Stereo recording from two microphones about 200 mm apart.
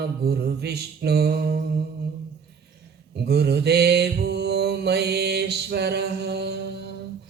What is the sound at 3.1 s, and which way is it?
Mantra, 55° right (ahead or behind).